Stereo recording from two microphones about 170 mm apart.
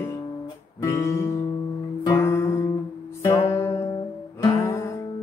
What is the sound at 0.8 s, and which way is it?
Music, 15° left (ahead or behind).